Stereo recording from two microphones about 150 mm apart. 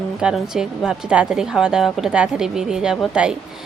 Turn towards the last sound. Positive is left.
turn(degrees=-5)  # may be behind; listen again after turning